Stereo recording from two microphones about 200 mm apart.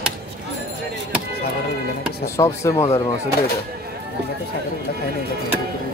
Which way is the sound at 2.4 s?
15° left (ahead or behind).